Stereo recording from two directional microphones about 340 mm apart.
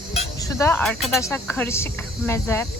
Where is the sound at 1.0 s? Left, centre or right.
Centre.